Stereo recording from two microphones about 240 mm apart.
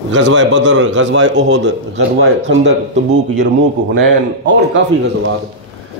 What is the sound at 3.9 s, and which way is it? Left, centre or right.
Speech, right.